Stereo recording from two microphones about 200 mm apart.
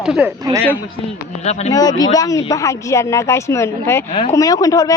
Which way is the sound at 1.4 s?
35° left (ahead or behind).